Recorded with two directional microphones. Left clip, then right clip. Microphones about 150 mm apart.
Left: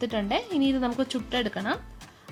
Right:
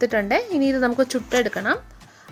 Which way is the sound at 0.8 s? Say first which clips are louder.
Right 8 dB; 40° right (ahead or behind).